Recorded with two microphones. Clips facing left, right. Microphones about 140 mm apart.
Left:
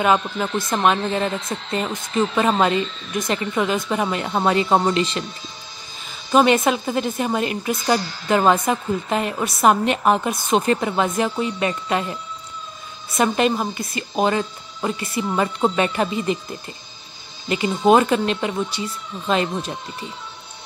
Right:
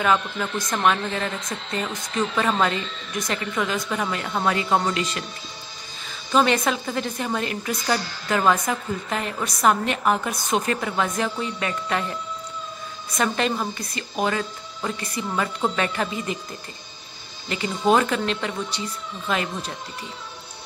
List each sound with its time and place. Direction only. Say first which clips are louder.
0.0 s a woman's voice: left 3 dB; 20° left (ahead or behind)
6.3 s a woman's voice: left 4 dB; 20° left (ahead or behind)
13.2 s a woman's voice: left 5 dB; 20° left (ahead or behind)
17.5 s a woman's voice: left 5 dB; 20° left (ahead or behind)